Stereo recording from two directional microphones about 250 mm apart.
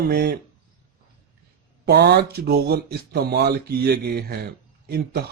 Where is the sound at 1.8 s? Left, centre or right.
Right.